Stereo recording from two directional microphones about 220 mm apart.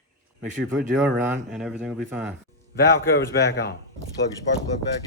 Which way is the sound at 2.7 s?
45° left (ahead or behind).